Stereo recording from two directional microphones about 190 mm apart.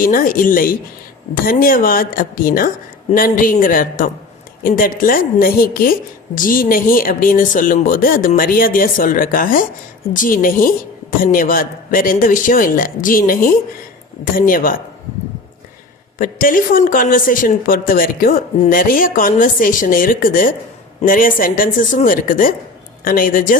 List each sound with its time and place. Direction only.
0.0 s speech: 45° left (ahead or behind)
16.1 s speech: 45° left (ahead or behind)